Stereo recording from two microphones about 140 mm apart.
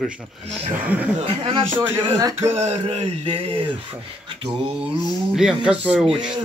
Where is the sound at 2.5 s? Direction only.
50° right (ahead or behind).